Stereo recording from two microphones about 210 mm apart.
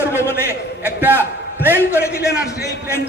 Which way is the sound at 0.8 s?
10° right (ahead or behind).